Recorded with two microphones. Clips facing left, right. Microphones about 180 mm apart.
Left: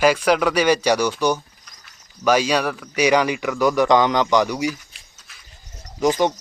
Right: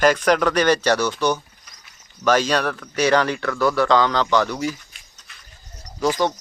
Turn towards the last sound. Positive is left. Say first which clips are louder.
# left 2 dB
turn(degrees=15)  # may be behind; listen again after turning